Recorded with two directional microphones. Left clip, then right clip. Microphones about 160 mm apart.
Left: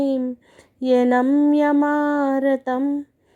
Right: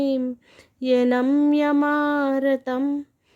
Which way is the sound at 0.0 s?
15° right (ahead or behind).